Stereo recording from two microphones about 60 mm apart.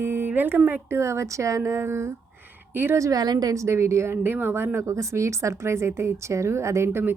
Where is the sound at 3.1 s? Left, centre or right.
Right.